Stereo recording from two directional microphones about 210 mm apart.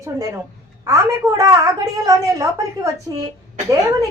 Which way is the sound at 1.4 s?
15° right (ahead or behind).